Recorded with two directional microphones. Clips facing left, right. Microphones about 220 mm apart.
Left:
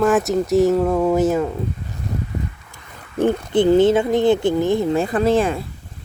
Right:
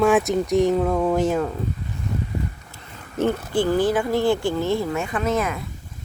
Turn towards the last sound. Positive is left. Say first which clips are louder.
# left 6 dB
turn(degrees=30)  # may be behind; listen again after turning